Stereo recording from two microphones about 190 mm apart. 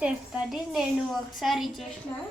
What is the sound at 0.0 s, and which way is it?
A woman's voice, 5° right (ahead or behind).